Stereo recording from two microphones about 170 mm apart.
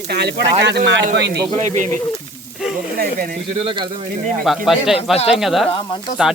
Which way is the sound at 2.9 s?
60° right (ahead or behind).